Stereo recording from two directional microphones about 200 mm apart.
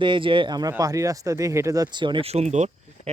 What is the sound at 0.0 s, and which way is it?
Speech, 25° right (ahead or behind).